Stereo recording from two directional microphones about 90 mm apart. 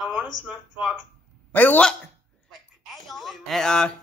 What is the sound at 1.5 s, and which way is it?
Speech, 20° left (ahead or behind).